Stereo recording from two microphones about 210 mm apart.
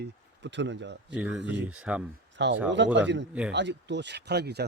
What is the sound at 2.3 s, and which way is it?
Speech, 60° right (ahead or behind).